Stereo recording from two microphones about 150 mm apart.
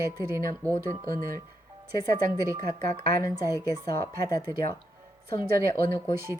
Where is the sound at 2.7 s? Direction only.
25° left (ahead or behind).